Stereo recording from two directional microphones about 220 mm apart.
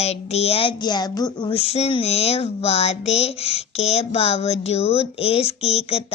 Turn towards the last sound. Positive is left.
turn(degrees=30)  # may be behind; listen again after turning